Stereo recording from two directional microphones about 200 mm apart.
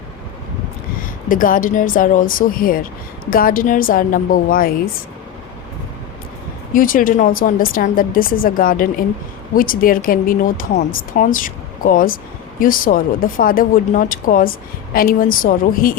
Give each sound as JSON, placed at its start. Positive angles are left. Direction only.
{"t": 1.0, "sound": "speech", "side_deg": 45}
{"t": 6.7, "sound": "speech", "side_deg": 45}